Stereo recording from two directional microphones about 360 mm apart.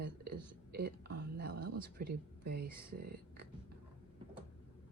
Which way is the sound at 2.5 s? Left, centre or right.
Right.